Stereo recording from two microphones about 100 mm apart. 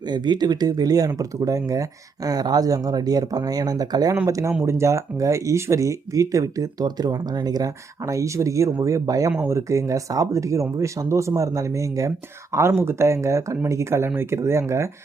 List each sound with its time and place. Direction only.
0.1 s speech: 45° right (ahead or behind); by 14.6 s 25° right (ahead or behind)